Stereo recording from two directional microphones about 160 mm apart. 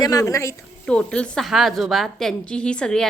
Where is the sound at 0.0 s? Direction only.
20° left (ahead or behind).